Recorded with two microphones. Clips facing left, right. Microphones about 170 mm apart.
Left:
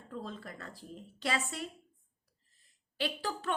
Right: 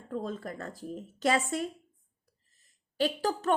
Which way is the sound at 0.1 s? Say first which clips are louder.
Right 7 dB; 50° right (ahead or behind).